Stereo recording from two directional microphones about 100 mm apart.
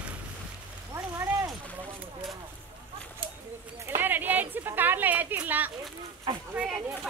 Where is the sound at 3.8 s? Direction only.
20° right (ahead or behind).